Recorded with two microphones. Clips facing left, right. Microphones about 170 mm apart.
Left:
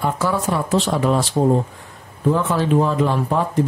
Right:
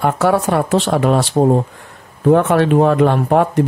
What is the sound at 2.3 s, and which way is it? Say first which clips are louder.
Speech: right 6 dB; 70° right (ahead or behind).